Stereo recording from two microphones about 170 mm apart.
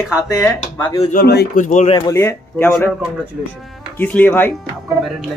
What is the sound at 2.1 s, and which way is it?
Speech, 15° left (ahead or behind).